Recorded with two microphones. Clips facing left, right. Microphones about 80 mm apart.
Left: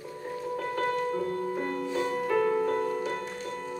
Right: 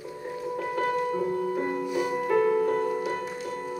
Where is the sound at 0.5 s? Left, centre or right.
Centre.